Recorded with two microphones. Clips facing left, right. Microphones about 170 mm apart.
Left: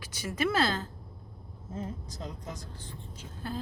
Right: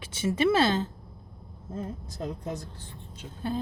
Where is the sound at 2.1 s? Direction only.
60° right (ahead or behind).